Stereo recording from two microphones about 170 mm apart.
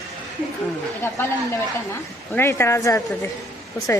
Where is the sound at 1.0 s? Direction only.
15° left (ahead or behind).